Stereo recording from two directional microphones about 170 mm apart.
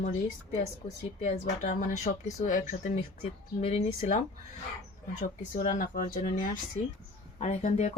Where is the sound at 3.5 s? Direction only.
35° left (ahead or behind).